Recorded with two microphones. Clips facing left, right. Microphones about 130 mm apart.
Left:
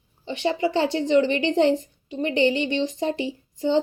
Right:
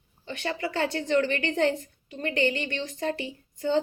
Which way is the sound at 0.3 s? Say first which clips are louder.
Left 8 dB; 20° left (ahead or behind).